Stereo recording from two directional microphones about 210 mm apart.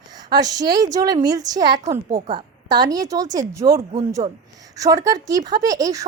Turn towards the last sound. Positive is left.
turn(degrees=-15)  # may be behind; listen again after turning